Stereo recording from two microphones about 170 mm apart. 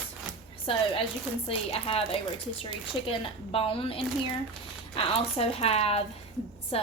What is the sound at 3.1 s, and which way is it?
A woman's voice, 35° left (ahead or behind).